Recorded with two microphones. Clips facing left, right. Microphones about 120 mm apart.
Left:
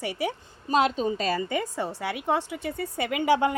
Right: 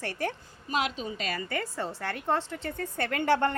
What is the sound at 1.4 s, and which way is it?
A woman's voice, 15° left (ahead or behind).